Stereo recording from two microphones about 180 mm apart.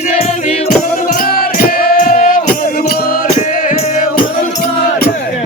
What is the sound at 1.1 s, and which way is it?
Music, 50° left (ahead or behind).